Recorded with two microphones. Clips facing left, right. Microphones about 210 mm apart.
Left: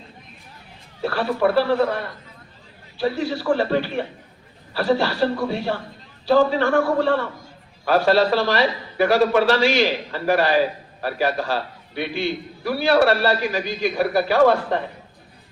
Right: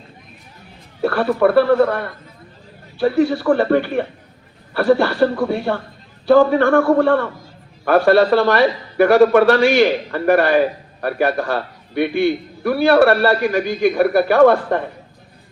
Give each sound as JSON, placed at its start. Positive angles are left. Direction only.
{"t": 1.0, "sound": "a man's voice", "side_deg": -55}